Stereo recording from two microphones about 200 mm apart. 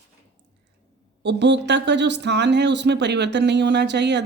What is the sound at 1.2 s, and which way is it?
Speech, 65° right (ahead or behind).